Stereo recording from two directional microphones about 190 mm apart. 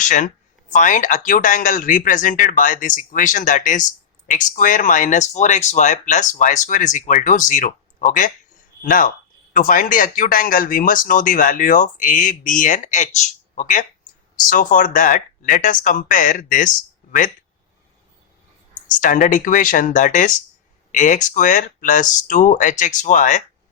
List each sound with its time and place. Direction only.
0.7 s a man's voice: 40° left (ahead or behind)
18.9 s a man's voice: 45° left (ahead or behind)